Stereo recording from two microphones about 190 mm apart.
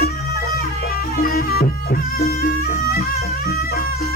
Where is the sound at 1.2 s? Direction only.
50° left (ahead or behind).